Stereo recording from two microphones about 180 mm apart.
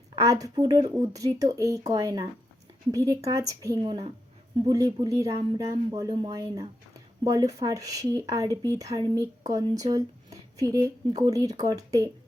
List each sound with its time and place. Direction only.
0.2 s speech: 20° right (ahead or behind)